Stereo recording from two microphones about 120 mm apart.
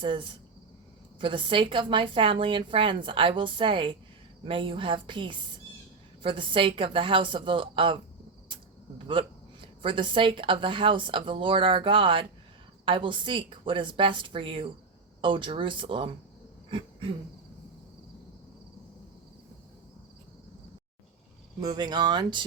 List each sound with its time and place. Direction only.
0.0 s a woman's voice: 45° right (ahead or behind)
9.0 s a woman's voice: 45° right (ahead or behind)
16.6 s a sound: 45° right (ahead or behind)
21.6 s speech: 35° right (ahead or behind)